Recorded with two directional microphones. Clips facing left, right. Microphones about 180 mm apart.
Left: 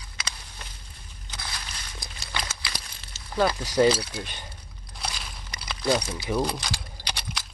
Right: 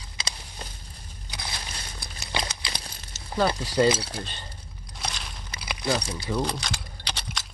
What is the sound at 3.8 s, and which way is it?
Speech, 5° right (ahead or behind).